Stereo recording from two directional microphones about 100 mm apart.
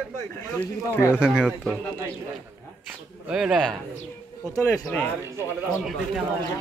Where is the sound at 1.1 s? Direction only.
5° right (ahead or behind).